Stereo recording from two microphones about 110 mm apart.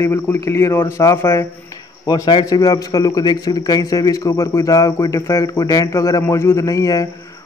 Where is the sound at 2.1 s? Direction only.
40° left (ahead or behind).